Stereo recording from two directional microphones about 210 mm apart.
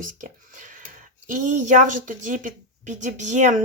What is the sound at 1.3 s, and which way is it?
A woman's voice, 35° right (ahead or behind).